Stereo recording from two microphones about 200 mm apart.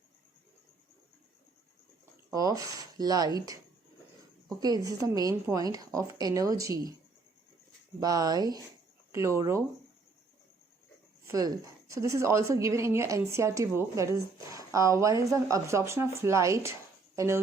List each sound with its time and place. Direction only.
2.3 s a woman's voice: 20° right (ahead or behind)
4.6 s a woman's voice: 20° right (ahead or behind)
8.0 s a woman's voice: 20° right (ahead or behind)
11.3 s a woman's voice: 15° right (ahead or behind)